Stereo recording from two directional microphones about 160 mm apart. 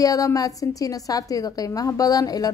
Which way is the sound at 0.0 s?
20° left (ahead or behind).